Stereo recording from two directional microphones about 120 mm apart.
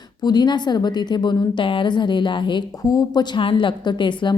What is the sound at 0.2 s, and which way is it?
A woman's voice, 35° left (ahead or behind).